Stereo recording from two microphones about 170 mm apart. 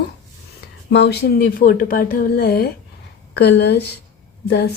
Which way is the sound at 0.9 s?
80° left.